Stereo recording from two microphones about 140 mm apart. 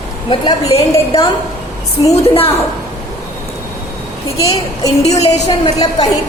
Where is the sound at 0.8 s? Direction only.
40° left (ahead or behind).